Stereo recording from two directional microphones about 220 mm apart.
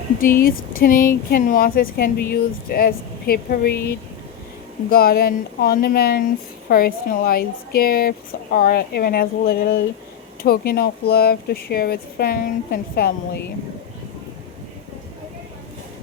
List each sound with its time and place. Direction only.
0.4 s speech: 40° left (ahead or behind)
4.9 s speech: 40° left (ahead or behind)